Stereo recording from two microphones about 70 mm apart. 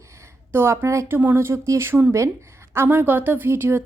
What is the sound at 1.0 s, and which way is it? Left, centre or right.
Speech, right.